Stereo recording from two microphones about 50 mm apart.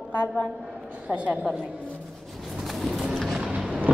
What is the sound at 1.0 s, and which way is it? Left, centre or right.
Speech, right.